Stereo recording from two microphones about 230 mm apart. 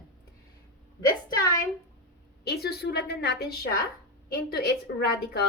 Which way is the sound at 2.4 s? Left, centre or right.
Left.